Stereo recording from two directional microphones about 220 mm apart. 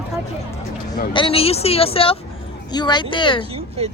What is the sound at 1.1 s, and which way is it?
A woman's voice, 25° left (ahead or behind).